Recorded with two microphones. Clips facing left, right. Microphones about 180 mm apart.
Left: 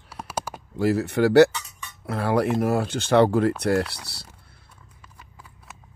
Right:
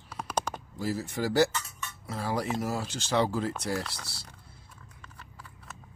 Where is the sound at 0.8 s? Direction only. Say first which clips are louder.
Left 11 dB; 65° left (ahead or behind).